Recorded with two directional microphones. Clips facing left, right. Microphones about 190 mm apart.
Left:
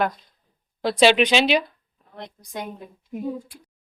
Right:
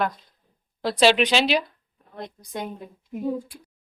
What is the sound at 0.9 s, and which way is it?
Speech, centre (ahead or behind).